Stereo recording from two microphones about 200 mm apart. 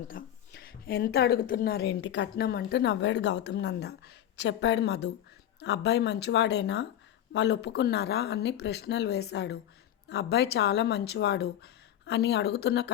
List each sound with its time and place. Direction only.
0.1 s a woman's voice: 45° left (ahead or behind)